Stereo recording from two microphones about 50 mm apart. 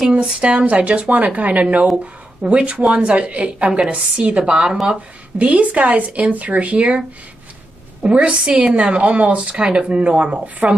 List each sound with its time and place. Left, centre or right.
0.1 s speech: right